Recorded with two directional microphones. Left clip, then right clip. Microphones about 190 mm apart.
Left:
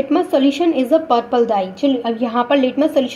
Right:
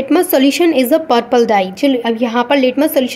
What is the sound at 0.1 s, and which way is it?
A woman's voice, 35° right (ahead or behind).